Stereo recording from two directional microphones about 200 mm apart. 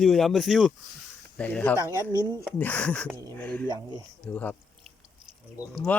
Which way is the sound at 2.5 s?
5° left (ahead or behind).